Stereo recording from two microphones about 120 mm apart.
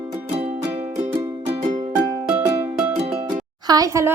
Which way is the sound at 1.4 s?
80° right.